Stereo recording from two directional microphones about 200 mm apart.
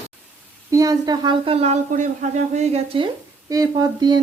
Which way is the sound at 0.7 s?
20° right (ahead or behind).